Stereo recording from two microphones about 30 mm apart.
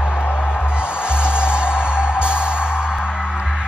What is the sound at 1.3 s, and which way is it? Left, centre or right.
Music, right.